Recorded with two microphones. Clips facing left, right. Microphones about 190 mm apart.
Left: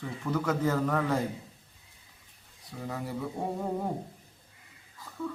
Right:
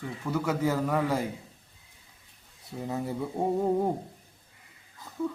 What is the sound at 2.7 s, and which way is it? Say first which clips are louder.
Speech: right 4 dB; 25° right (ahead or behind).